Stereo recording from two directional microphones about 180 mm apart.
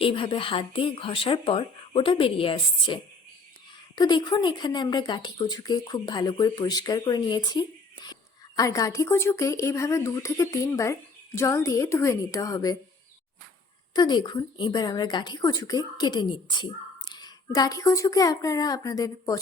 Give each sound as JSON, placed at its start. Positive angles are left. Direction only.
{"t": 0.0, "sound": "a woman's voice", "side_deg": 30}
{"t": 13.9, "sound": "speech", "side_deg": 25}